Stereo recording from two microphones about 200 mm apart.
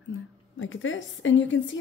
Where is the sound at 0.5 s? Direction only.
75° left (ahead or behind).